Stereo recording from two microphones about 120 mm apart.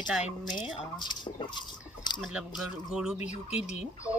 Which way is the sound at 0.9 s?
40° left (ahead or behind).